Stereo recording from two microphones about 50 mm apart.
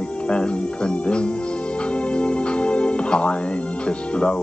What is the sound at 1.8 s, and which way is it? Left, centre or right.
Music, left.